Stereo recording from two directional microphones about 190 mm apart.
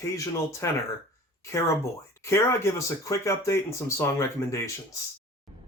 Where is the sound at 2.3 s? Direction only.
15° left (ahead or behind).